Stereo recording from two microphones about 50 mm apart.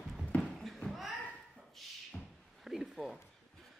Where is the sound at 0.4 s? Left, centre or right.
Centre.